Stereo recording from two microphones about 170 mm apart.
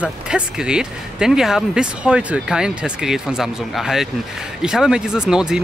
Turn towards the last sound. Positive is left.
turn(degrees=-5)  # may be behind; listen again after turning